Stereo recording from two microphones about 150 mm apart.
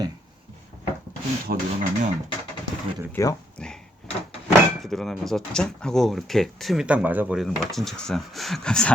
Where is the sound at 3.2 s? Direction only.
20° left (ahead or behind).